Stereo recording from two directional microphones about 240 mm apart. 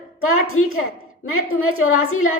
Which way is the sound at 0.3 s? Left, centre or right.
Left.